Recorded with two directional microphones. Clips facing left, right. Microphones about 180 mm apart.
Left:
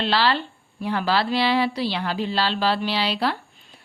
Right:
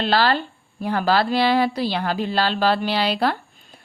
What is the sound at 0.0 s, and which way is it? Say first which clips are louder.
A woman's voice: right 2 dB; 45° right (ahead or behind).